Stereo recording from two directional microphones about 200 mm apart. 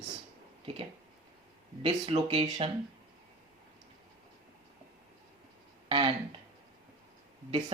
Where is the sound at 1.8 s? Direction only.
25° right (ahead or behind).